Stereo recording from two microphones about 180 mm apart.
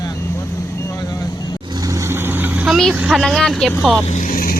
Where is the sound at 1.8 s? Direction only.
15° right (ahead or behind).